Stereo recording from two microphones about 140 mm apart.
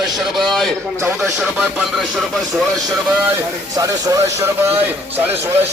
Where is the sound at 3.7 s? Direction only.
25° right (ahead or behind).